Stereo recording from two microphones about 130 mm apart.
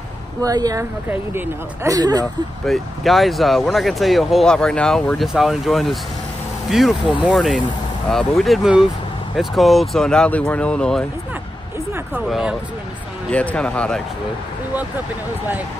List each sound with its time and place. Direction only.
0.4 s speech: 30° right (ahead or behind)
1.0 s speech: 15° right (ahead or behind)
2.6 s speech: centre (ahead or behind)
12.3 s speech: 5° right (ahead or behind)
13.3 s speech: 10° left (ahead or behind)